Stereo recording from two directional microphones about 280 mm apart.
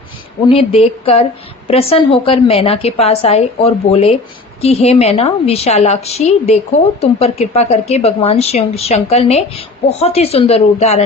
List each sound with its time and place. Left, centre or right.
0.4 s speech: left